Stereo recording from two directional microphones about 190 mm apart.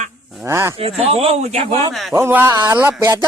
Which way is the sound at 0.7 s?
30° right (ahead or behind).